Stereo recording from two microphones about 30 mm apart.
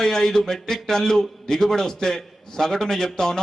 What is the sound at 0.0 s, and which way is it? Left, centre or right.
A man's voice, centre.